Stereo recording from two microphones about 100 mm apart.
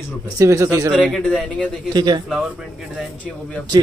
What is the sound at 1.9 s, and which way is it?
Speech, 45° right (ahead or behind).